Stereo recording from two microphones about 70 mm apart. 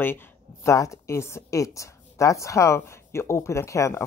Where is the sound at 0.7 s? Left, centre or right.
Left.